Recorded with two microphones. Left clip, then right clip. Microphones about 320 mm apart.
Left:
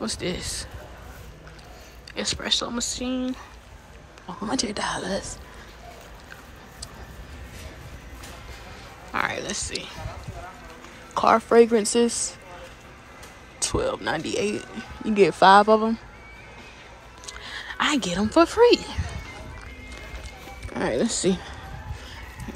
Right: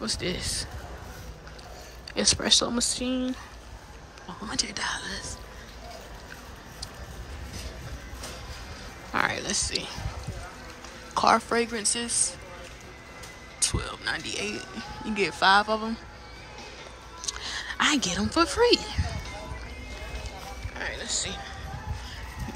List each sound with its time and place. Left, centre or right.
0.0 s speech: centre
2.1 s speech: centre
9.1 s speech: centre
11.1 s speech: centre
13.6 s speech: centre
17.2 s music: centre
20.8 s speech: centre